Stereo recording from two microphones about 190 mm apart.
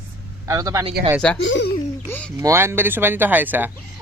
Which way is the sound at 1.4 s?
70° left (ahead or behind).